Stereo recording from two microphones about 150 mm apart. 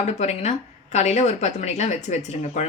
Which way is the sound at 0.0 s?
45° left (ahead or behind).